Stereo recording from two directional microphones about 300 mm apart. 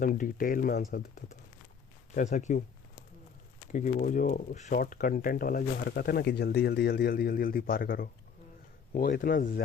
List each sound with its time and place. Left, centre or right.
0.0 s speech: left
3.7 s speech: left